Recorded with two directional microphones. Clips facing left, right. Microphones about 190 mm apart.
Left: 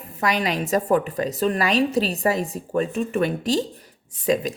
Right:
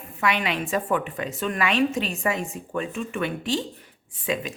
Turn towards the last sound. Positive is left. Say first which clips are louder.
# left 6 dB
turn(degrees=40)  # may be behind; listen again after turning